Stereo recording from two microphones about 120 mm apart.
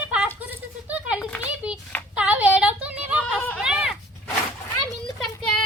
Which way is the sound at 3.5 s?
5° right (ahead or behind).